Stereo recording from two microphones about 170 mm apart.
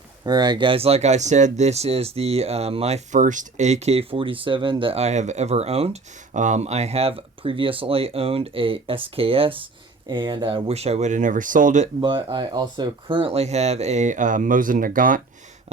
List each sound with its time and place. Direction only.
0.3 s speech: 25° right (ahead or behind); by 11.9 s 50° right (ahead or behind)
11.9 s speech: 30° right (ahead or behind); by 15.2 s 55° right (ahead or behind)